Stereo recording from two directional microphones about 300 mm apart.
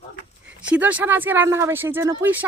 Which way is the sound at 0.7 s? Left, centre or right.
Centre.